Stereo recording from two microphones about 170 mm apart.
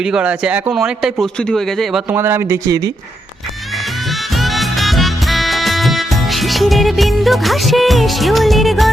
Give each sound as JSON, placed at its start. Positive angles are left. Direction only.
{"t": 0.0, "sound": "speech", "side_deg": -5}
{"t": 2.0, "sound": "speech", "side_deg": -15}
{"t": 3.8, "sound": "music", "side_deg": 0}